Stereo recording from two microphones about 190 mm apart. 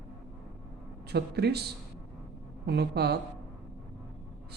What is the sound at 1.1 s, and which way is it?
A man's voice, 60° right (ahead or behind).